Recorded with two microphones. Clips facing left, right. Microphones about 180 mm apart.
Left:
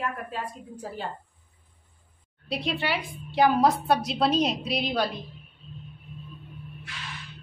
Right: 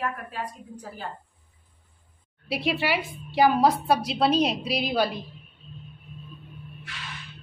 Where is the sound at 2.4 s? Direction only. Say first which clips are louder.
Right 3 dB; 5° right (ahead or behind).